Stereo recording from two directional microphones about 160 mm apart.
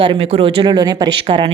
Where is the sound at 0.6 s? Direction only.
25° right (ahead or behind).